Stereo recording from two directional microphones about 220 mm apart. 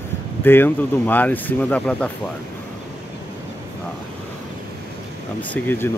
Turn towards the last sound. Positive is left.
turn(degrees=10)  # may be behind; listen again after turning